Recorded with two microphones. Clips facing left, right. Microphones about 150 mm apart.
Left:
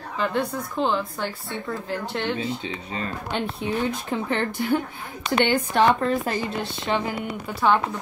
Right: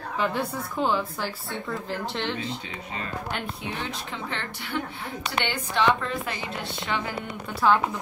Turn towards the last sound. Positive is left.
turn(degrees=5)  # may be behind; listen again after turning